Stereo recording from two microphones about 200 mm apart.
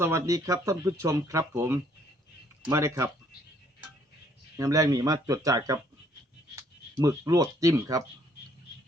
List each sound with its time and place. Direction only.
0.0 s speech: 15° right (ahead or behind)
4.5 s speech: 15° right (ahead or behind)